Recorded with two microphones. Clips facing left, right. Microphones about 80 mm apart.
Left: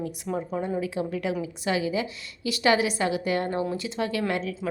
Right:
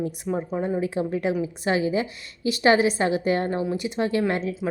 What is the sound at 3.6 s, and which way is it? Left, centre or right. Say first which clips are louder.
Speech: right 3 dB; centre.